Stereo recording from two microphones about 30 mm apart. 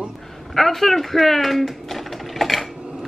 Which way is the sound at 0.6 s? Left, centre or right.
Centre.